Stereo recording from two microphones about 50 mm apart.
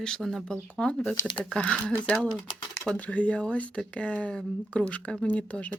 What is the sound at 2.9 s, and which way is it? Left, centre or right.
A woman's voice, left.